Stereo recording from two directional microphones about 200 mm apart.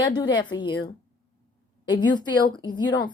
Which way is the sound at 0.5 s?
20° left (ahead or behind).